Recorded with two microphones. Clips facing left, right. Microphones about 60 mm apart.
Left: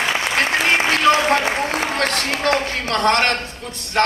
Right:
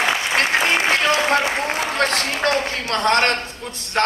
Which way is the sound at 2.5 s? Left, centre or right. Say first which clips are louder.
Left 3 dB; left.